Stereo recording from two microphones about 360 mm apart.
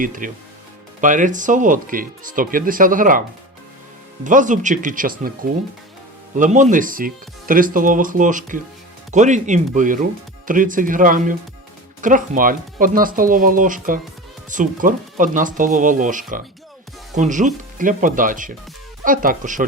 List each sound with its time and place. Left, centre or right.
0.0 s speech: right
6.3 s speech: right